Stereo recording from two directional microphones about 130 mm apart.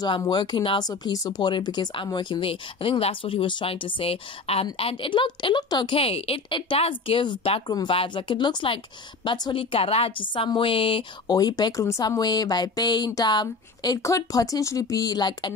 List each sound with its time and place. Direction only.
0.0 s speech: 35° left (ahead or behind)
5.9 s a woman's voice: 50° left (ahead or behind)
11.3 s speech: 30° left (ahead or behind)